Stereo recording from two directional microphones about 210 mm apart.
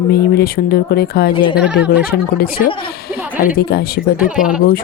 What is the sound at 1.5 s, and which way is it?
Speech, 5° right (ahead or behind).